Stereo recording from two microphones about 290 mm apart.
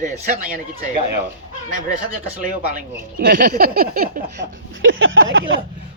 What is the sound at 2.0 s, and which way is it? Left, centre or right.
Speech, right.